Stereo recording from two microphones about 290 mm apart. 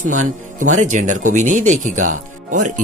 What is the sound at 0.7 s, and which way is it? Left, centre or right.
Speech, right.